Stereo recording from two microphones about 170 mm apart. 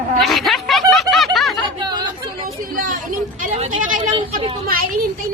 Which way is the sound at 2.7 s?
50° right (ahead or behind).